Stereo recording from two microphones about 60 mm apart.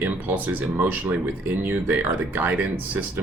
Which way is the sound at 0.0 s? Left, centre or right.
Right.